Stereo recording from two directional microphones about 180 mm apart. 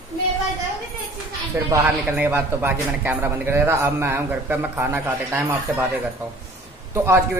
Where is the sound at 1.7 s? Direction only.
10° right (ahead or behind).